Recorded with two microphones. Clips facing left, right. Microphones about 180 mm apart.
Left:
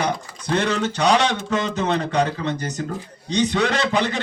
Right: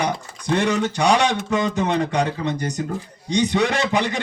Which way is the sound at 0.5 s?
15° right (ahead or behind).